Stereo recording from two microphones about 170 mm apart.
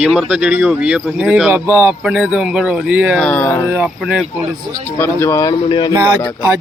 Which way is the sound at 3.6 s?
10° right (ahead or behind).